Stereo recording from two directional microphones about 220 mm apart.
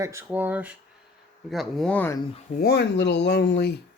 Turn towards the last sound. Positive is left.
turn(degrees=50)  # may be behind; listen again after turning